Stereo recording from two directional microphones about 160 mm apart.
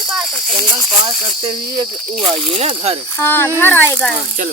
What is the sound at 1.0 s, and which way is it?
Speech, 30° right (ahead or behind).